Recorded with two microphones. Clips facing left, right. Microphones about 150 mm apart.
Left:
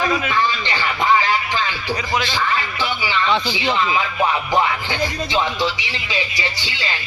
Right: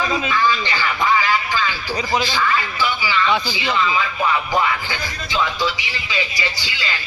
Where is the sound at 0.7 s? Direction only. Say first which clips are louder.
Left 1 dB; 25° left (ahead or behind).